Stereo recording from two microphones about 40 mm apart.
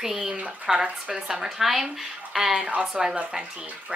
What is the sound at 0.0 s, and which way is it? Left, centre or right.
A woman's voice, centre.